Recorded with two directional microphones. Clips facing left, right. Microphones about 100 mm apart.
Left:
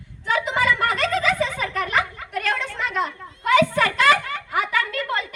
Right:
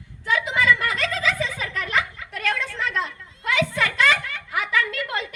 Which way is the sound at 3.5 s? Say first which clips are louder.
Left 5 dB; 40° left (ahead or behind).